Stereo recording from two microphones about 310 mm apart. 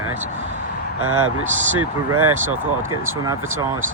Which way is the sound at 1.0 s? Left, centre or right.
Right.